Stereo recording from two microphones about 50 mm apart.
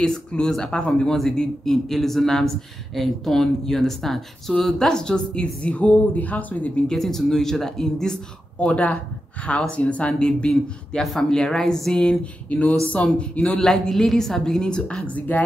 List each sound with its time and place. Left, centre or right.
0.0 s speech: centre
6.9 s speech: centre
8.5 s speech: left
12.2 s speech: left
13.6 s speech: centre
15.0 s speech: left